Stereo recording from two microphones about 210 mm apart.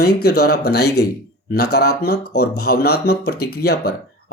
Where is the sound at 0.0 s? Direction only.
50° left (ahead or behind).